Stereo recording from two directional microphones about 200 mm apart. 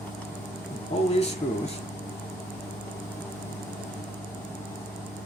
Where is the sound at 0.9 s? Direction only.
30° left (ahead or behind).